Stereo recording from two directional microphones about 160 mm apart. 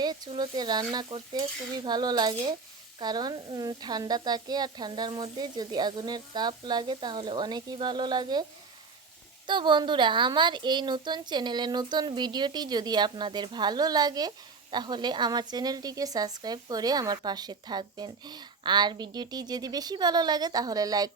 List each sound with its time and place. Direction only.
0.0 s speech: 25° right (ahead or behind)
9.5 s speech: 30° right (ahead or behind)